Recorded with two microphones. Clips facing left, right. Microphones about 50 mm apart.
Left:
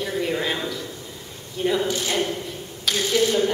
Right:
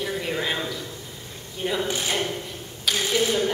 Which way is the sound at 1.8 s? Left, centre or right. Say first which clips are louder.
Left 2 dB; right.